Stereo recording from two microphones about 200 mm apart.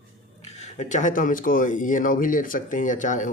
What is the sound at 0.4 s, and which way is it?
Speech, 35° left (ahead or behind).